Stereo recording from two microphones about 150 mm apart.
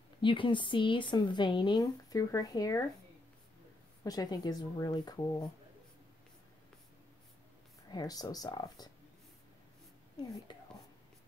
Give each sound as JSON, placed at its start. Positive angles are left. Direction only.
{"t": 0.2, "sound": "speech", "side_deg": 35}
{"t": 4.0, "sound": "speech", "side_deg": 25}
{"t": 7.9, "sound": "speech", "side_deg": 25}
{"t": 10.1, "sound": "speech", "side_deg": 25}